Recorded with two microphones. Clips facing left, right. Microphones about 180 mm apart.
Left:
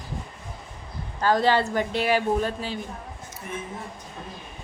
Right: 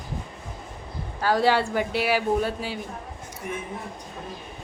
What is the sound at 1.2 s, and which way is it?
Speech, 10° right (ahead or behind).